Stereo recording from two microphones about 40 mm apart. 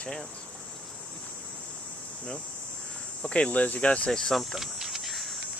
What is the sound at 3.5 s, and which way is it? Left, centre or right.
Speech, left.